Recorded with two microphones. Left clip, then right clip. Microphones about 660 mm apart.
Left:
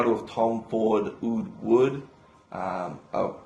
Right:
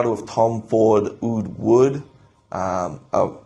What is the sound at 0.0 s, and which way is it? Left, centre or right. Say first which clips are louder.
Speech: right 5 dB; right.